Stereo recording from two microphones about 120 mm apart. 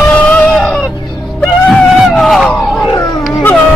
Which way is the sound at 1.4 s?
5° left (ahead or behind).